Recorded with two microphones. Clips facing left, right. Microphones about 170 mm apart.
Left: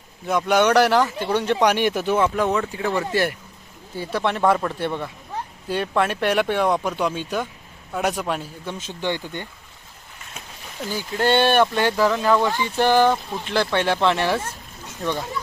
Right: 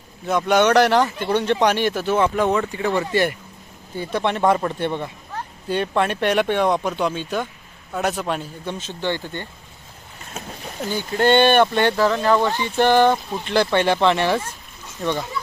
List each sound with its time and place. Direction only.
0.3 s speech: 10° left (ahead or behind)
2.1 s speech: centre (ahead or behind)
10.8 s speech: 5° left (ahead or behind)
12.3 s speech: 15° right (ahead or behind)
12.7 s speech: 5° left (ahead or behind)